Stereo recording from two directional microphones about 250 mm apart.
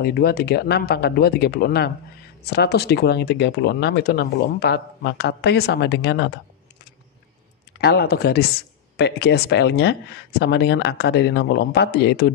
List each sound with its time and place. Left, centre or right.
0.0 s speech: left
7.8 s speech: left